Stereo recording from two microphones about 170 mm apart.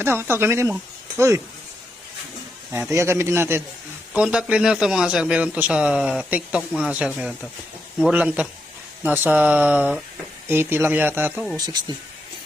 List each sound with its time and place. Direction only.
0.0 s a man's voice: 15° right (ahead or behind)
2.9 s a man's voice: 15° right (ahead or behind)
11.5 s speech: 25° right (ahead or behind)